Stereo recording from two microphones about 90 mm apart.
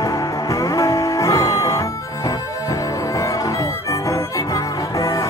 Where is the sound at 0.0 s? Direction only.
35° left (ahead or behind).